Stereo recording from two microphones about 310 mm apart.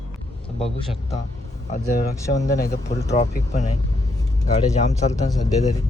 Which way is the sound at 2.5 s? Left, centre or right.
Left.